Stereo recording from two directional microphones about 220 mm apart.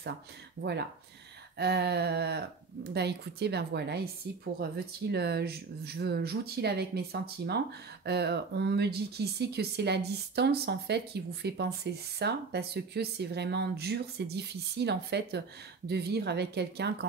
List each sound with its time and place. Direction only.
0.6 s speech: 50° right (ahead or behind)